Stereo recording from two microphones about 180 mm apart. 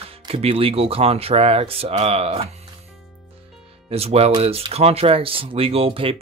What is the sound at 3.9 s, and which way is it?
Speech, 35° right (ahead or behind).